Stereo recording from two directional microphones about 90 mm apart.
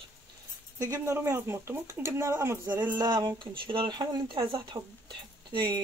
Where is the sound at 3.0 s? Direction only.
55° right (ahead or behind).